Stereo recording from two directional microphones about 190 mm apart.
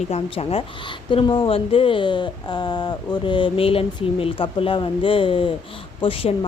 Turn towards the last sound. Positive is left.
turn(degrees=30)  # may be behind; listen again after turning